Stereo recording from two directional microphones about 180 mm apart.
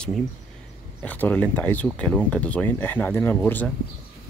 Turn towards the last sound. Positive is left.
turn(degrees=10)  # may be behind; listen again after turning